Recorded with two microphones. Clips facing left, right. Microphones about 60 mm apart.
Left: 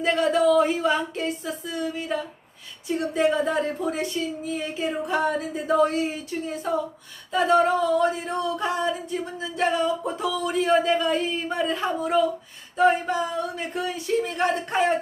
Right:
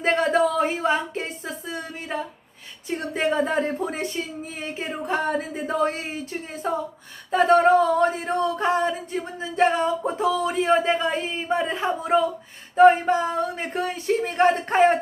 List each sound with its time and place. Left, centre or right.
0.0 s speech: right